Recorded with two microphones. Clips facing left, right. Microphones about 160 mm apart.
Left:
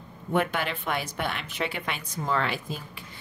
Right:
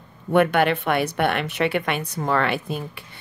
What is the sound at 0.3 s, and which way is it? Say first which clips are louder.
A woman's voice: right 9 dB; 65° right (ahead or behind).